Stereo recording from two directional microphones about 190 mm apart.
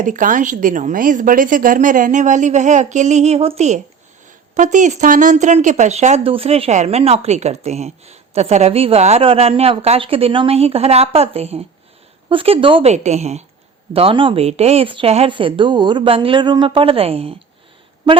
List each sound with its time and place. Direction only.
0.0 s a woman's voice: 45° right (ahead or behind); by 18.2 s 25° right (ahead or behind)